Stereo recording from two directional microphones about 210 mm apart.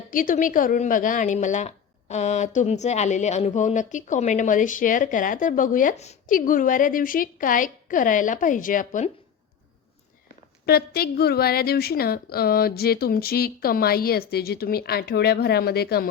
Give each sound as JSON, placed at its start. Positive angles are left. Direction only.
{"t": 0.1, "sound": "a woman's voice", "side_deg": 40}
{"t": 10.7, "sound": "a woman's voice", "side_deg": 50}